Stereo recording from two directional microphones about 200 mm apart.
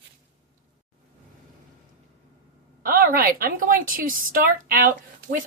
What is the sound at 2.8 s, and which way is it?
A woman's voice, 45° right (ahead or behind).